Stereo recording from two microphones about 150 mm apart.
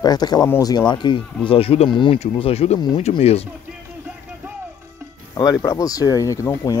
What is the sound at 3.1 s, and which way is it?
Speech, 45° left (ahead or behind).